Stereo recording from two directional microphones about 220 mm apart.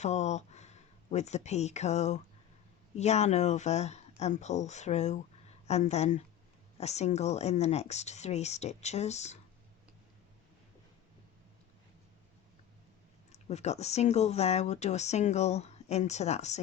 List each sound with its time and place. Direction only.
0.0 s speech: 30° left (ahead or behind)
13.3 s speech: 30° left (ahead or behind)